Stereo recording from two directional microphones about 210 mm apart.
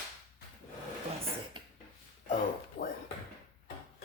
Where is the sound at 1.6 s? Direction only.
20° right (ahead or behind).